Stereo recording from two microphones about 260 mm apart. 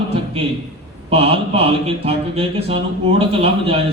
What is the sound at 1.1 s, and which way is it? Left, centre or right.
A man's voice, right.